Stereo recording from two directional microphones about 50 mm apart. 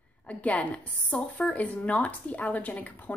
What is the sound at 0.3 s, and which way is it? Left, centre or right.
A woman's voice, left.